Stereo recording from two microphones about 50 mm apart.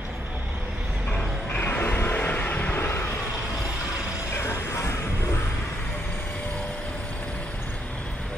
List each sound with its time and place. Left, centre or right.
1.5 s a sound: left
2.0 s vehicle: left
4.4 s music: left